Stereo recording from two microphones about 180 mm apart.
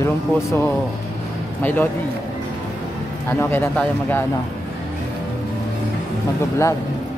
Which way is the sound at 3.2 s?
10° left (ahead or behind).